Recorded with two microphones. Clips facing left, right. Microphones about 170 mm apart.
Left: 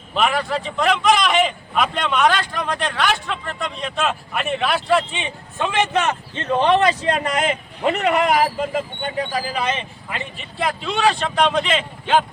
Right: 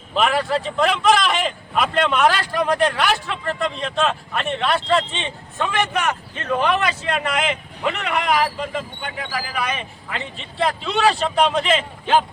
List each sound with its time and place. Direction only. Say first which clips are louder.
0.1 s a man's voice: right 1 dB; centre (ahead or behind); by 9.1 s 45° left (ahead or behind)
9.3 s speech: left 3 dB; 30° left (ahead or behind)
10.6 s a man's voice: right 1 dB; centre (ahead or behind)